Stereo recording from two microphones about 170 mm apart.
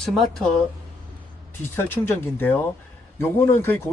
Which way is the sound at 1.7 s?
10° left (ahead or behind).